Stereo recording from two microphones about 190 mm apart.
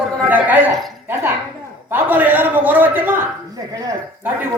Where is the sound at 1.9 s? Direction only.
10° right (ahead or behind).